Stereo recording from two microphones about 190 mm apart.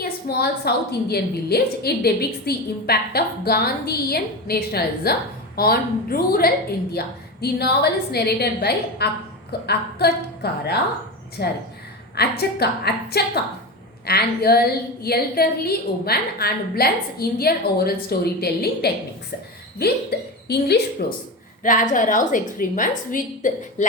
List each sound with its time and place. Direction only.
0.0 s a woman's voice: 60° left (ahead or behind)
21.6 s a woman's voice: 45° left (ahead or behind)